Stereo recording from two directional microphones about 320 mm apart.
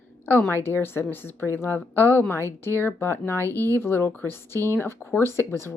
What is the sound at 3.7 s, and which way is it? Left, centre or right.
Speech, centre.